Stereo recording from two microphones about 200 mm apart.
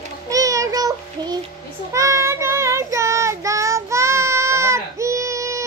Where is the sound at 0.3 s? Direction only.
15° right (ahead or behind).